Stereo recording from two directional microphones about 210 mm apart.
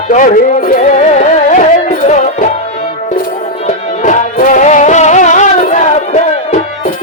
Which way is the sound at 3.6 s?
35° left (ahead or behind).